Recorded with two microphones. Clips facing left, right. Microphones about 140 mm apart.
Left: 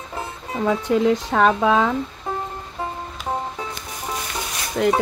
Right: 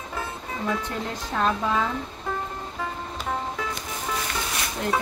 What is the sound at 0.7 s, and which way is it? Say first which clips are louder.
Speech: left 12 dB; 90° left.